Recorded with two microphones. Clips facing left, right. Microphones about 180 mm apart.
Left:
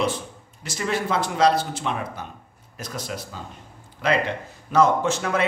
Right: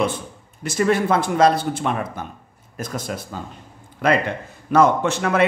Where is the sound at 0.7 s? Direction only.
55° right (ahead or behind).